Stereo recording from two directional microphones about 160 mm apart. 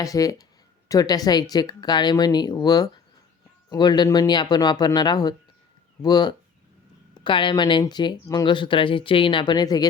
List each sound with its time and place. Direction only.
0.0 s speech: 20° left (ahead or behind)